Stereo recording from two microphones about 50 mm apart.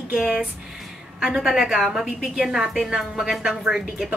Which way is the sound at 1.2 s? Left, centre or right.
Centre.